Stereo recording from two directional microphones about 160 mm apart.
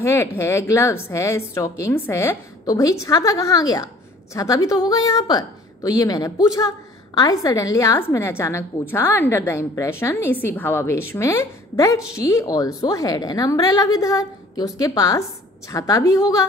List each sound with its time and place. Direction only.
0.0 s a woman's voice: 15° left (ahead or behind)